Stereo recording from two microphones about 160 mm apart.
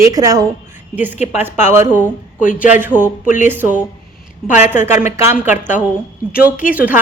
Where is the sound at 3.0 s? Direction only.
55° left (ahead or behind).